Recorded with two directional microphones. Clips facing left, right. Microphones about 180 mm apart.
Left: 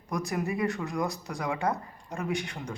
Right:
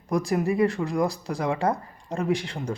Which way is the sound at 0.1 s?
30° right (ahead or behind).